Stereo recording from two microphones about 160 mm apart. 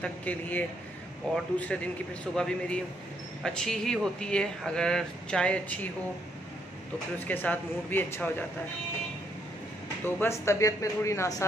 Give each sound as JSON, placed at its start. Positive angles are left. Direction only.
{"t": 0.0, "sound": "speech", "side_deg": 10}
{"t": 7.2, "sound": "speech", "side_deg": 10}
{"t": 10.0, "sound": "speech", "side_deg": 15}